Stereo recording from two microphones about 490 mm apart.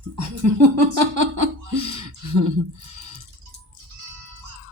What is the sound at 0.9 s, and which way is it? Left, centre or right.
Speech, right.